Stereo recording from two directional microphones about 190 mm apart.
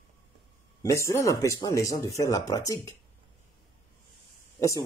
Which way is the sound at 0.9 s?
15° left (ahead or behind).